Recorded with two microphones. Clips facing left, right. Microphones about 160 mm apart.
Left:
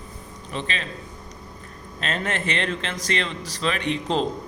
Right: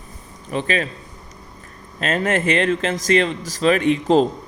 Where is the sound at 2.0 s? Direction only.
45° right (ahead or behind).